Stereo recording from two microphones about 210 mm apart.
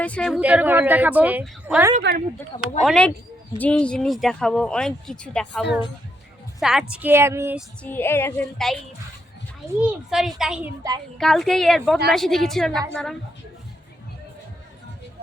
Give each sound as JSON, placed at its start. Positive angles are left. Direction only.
{"t": 0.0, "sound": "speech", "side_deg": 5}
{"t": 0.3, "sound": "a woman's voice", "side_deg": -5}
{"t": 2.0, "sound": "speech", "side_deg": -45}
{"t": 2.8, "sound": "a woman's voice", "side_deg": 5}
{"t": 7.8, "sound": "speech", "side_deg": 10}
{"t": 9.8, "sound": "speech", "side_deg": 0}